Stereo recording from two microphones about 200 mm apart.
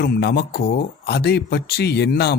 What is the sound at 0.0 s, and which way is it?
A man's voice, 55° left (ahead or behind).